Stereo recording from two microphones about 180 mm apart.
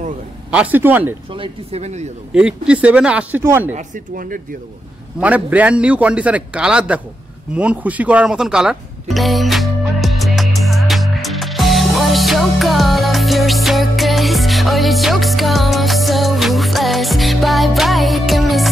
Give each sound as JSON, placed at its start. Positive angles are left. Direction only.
{"t": 0.5, "sound": "a man's voice", "side_deg": -10}
{"t": 1.3, "sound": "speech", "side_deg": -30}
{"t": 2.3, "sound": "a man's voice", "side_deg": -5}
{"t": 3.7, "sound": "speech", "side_deg": -50}
{"t": 5.2, "sound": "a man's voice", "side_deg": -10}
{"t": 7.5, "sound": "music", "side_deg": -10}